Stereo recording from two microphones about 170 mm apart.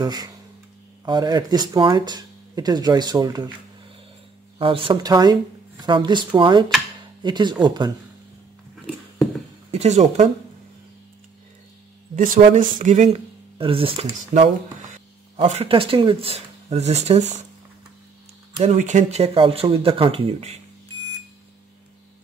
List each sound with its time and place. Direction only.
0.0 s speech: 25° right (ahead or behind)
4.6 s speech: 30° right (ahead or behind)
9.7 s speech: 40° right (ahead or behind)
12.5 s speech: 50° right (ahead or behind); by 14.0 s 30° right (ahead or behind)
14.3 s speech: 50° right (ahead or behind)
15.4 s speech: 35° right (ahead or behind)
18.6 s speech: 45° right (ahead or behind)